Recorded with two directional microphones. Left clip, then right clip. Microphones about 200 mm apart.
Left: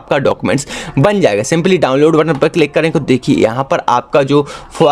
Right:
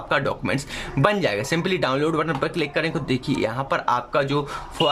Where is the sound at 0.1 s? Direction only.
30° left (ahead or behind).